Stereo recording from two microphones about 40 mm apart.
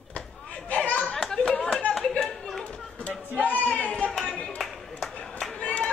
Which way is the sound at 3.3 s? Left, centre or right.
Left.